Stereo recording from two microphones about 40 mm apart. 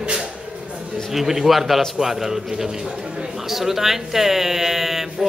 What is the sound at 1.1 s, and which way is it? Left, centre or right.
Speech, centre.